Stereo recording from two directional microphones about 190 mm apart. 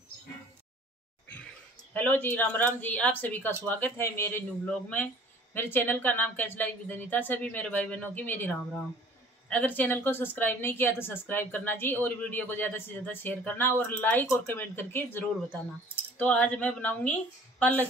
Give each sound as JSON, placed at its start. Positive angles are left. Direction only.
{"t": 2.0, "sound": "speech", "side_deg": 10}
{"t": 16.2, "sound": "speech", "side_deg": 10}